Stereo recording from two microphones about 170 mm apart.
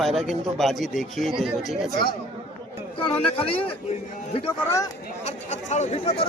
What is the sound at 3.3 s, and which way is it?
Speech, 35° left (ahead or behind).